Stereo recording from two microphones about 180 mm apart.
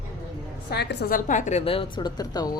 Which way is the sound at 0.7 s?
65° left (ahead or behind).